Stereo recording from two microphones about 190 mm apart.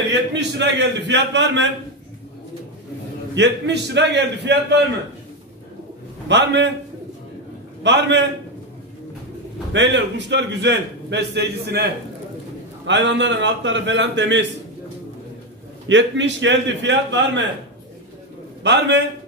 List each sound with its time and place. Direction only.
0.1 s a man's voice: 65° right (ahead or behind)
3.3 s a man's voice: 65° right (ahead or behind)
6.2 s a man's voice: 65° right (ahead or behind)
7.8 s a man's voice: 70° right (ahead or behind)
9.7 s a man's voice: 70° right (ahead or behind)
15.9 s a man's voice: 75° right (ahead or behind)
18.6 s a man's voice: 65° right (ahead or behind)